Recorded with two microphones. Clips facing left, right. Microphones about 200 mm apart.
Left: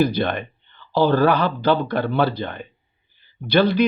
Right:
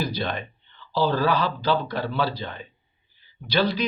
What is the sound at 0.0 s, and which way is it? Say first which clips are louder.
Speech: left 8 dB; 60° left (ahead or behind).